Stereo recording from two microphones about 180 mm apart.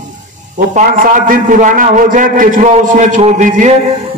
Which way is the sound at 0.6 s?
50° right (ahead or behind).